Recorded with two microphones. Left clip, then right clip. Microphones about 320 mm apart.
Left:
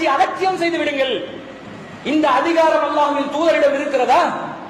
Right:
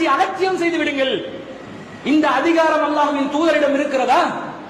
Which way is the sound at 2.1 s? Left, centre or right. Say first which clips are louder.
Even; right.